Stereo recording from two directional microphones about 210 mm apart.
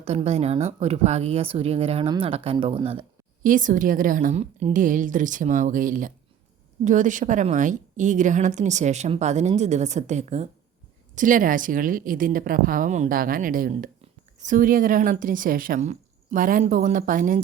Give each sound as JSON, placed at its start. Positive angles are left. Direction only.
{"t": 0.0, "sound": "a woman's voice", "side_deg": -30}
{"t": 3.4, "sound": "a woman's voice", "side_deg": -40}